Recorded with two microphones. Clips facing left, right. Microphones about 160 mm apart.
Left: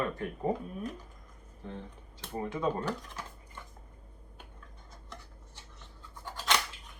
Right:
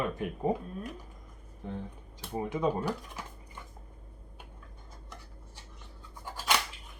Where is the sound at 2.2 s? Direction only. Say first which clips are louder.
Right 3 dB; 10° right (ahead or behind).